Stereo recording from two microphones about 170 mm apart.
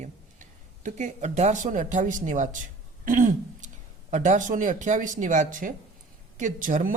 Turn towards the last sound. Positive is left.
turn(degrees=-50)  # may be behind; listen again after turning